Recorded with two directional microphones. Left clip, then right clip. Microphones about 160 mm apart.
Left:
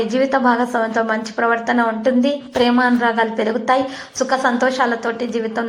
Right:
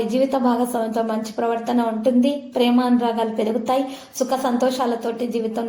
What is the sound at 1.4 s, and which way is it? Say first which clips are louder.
Speech: left 5 dB; 25° left (ahead or behind).